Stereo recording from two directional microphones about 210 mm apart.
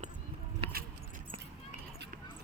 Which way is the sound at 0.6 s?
25° right (ahead or behind).